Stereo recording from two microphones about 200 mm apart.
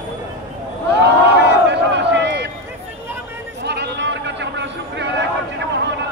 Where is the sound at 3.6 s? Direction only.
60° right (ahead or behind).